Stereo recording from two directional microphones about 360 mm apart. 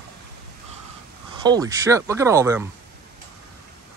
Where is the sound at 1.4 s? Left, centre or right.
Centre.